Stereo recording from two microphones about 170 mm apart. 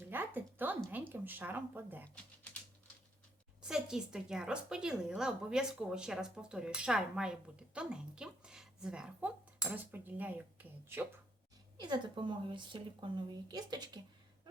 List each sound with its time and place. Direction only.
0.0 s a sound: 10° right (ahead or behind)
0.9 s speech: 10° right (ahead or behind)
2.1 s typing: 10° left (ahead or behind)
3.6 s a woman's voice: 5° right (ahead or behind)
11.8 s a woman's voice: 25° right (ahead or behind)